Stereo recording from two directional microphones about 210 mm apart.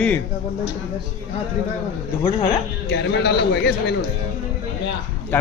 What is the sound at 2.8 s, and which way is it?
A man's voice, 55° left (ahead or behind).